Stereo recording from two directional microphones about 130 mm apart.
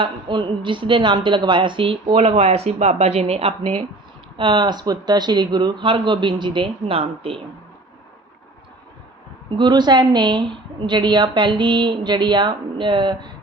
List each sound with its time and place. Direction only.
0.0 s a woman's voice: 35° right (ahead or behind)
4.4 s a woman's voice: 35° right (ahead or behind)
9.5 s a woman's voice: 35° right (ahead or behind)